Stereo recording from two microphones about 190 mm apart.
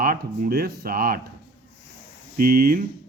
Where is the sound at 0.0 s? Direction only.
50° right (ahead or behind).